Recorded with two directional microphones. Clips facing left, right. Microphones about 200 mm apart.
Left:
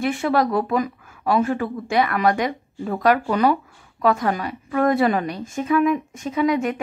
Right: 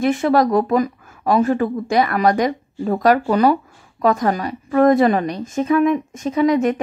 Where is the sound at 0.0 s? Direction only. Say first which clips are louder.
Right 4 dB; 40° right (ahead or behind).